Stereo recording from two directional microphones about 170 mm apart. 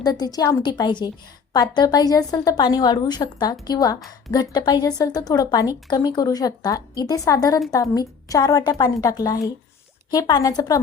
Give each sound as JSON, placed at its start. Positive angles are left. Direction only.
{"t": 0.0, "sound": "a woman's voice", "side_deg": 20}